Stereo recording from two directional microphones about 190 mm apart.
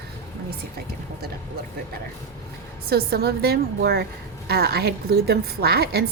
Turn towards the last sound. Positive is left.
turn(degrees=-55)  # may be behind; listen again after turning